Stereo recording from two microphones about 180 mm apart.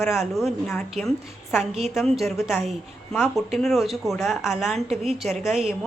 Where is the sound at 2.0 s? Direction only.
Centre (ahead or behind).